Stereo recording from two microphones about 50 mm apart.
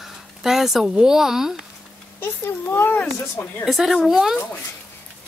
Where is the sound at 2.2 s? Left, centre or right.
Left.